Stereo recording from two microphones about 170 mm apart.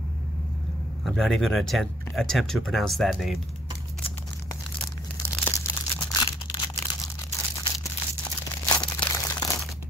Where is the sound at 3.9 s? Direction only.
10° left (ahead or behind).